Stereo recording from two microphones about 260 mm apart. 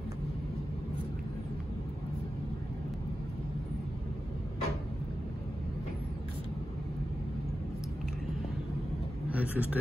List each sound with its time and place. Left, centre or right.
9.3 s vehicle: centre